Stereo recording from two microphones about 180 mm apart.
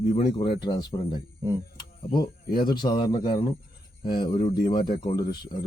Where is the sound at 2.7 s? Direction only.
25° left (ahead or behind).